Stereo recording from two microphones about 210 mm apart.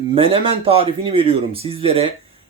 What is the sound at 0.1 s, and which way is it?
Speech, 25° right (ahead or behind).